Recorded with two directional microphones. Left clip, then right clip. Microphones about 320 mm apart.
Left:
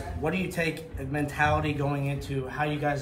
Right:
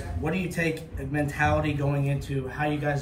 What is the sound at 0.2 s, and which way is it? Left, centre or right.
Speech, centre.